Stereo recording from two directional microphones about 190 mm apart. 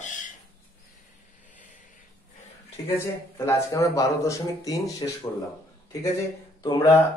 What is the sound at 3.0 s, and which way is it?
Speech, 15° left (ahead or behind).